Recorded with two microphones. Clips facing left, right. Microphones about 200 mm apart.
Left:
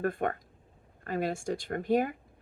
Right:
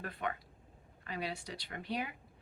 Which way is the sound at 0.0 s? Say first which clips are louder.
Left 10 dB; 50° left (ahead or behind).